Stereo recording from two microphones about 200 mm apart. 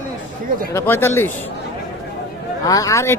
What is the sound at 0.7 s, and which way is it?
Speech, 10° left (ahead or behind).